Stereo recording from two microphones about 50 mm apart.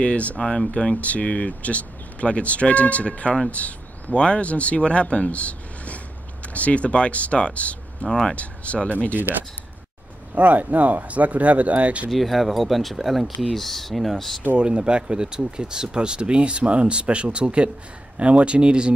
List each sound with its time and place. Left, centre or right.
0.0 s speech: left
0.4 s speech: centre
8.1 s speech: centre
8.4 s speech: left
10.3 s speech: right
12.1 s speech: centre
14.6 s speech: centre